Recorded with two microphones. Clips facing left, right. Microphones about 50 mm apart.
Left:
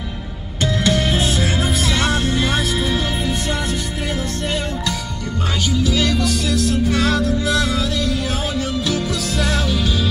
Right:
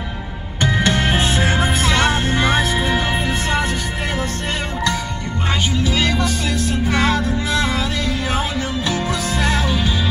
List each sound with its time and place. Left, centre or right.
0.7 s music: right
5.7 s music: right